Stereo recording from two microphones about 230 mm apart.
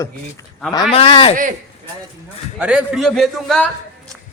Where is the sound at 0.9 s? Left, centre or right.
Left.